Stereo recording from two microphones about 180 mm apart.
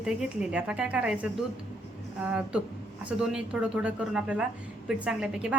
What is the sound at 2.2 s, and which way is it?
A woman's voice, 5° right (ahead or behind).